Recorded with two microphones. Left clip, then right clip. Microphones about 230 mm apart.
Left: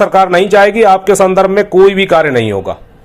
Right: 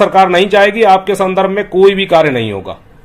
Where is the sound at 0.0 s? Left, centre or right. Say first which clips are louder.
Even; left.